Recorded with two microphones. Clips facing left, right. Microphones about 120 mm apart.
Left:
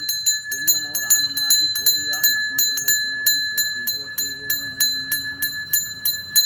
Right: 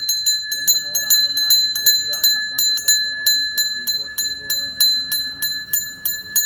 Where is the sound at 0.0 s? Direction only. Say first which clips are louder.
Even; 10° right (ahead or behind).